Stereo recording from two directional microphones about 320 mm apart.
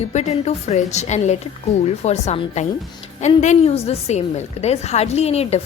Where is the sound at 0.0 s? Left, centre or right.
Left.